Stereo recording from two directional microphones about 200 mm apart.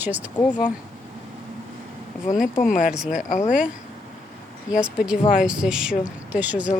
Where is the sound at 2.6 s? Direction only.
40° left (ahead or behind).